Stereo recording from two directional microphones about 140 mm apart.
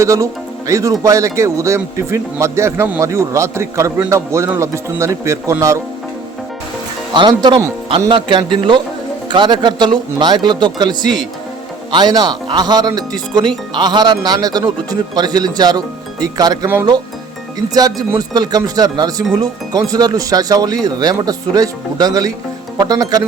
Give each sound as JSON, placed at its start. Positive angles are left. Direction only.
{"t": 0.0, "sound": "speech", "side_deg": -20}
{"t": 7.1, "sound": "speech", "side_deg": -30}
{"t": 18.1, "sound": "speech", "side_deg": -25}